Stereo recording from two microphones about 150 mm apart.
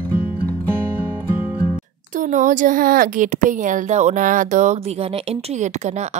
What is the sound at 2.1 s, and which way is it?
Speech, 60° right (ahead or behind).